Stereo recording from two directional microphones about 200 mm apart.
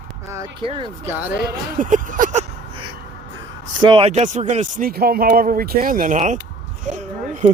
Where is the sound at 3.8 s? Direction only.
25° right (ahead or behind); by 6.3 s 40° right (ahead or behind).